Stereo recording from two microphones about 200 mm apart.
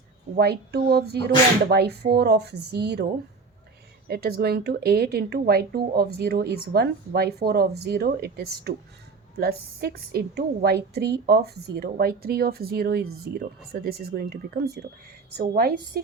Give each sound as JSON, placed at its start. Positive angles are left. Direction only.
{"t": 0.3, "sound": "speech", "side_deg": -50}
{"t": 4.1, "sound": "speech", "side_deg": -50}